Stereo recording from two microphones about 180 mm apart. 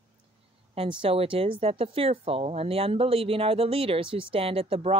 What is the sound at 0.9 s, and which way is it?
Speech, 30° right (ahead or behind).